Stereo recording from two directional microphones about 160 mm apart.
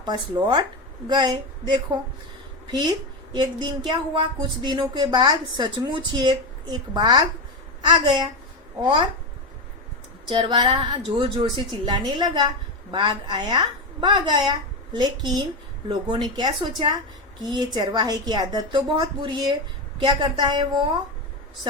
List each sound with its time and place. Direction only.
0.0 s speech: 25° right (ahead or behind)
3.3 s speech: 25° right (ahead or behind)
10.2 s speech: 30° right (ahead or behind)